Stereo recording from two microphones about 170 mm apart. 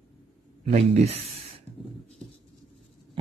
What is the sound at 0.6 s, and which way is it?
Speech, 40° right (ahead or behind).